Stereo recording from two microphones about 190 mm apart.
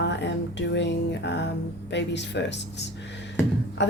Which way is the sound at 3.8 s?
65° left (ahead or behind).